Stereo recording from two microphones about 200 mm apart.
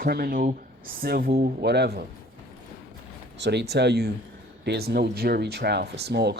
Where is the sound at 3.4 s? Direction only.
60° right (ahead or behind).